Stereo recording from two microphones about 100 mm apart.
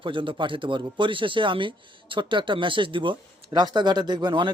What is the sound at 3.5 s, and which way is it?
Speech, 45° right (ahead or behind).